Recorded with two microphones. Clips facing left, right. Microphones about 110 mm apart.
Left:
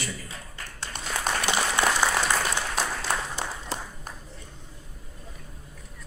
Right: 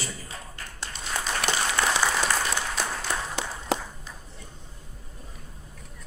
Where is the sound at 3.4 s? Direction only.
75° right (ahead or behind).